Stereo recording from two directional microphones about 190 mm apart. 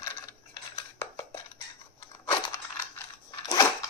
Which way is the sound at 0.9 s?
10° left (ahead or behind).